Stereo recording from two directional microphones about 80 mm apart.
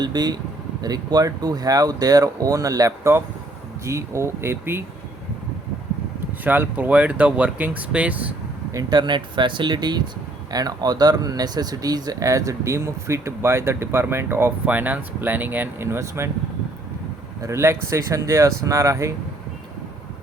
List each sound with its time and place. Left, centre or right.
0.0 s speech: right
6.4 s speech: right
8.7 s speech: right
9.0 s speech: right
10.5 s speech: right
17.4 s speech: right